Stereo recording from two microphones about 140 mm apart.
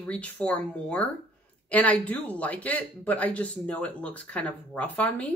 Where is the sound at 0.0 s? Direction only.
10° left (ahead or behind).